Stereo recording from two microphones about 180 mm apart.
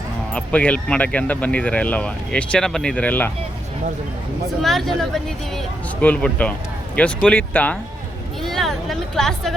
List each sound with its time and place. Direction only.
0.3 s speech: 5° left (ahead or behind)
4.6 s speech: centre (ahead or behind)